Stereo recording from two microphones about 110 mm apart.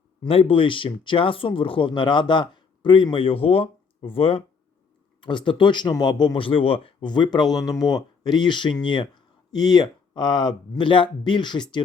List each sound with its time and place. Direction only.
0.2 s speech: 60° left (ahead or behind)
5.2 s speech: 45° left (ahead or behind)